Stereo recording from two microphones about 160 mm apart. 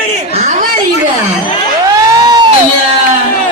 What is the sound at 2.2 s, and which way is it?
Music, 25° right (ahead or behind).